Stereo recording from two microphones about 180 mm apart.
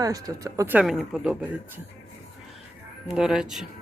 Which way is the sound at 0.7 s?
Centre (ahead or behind).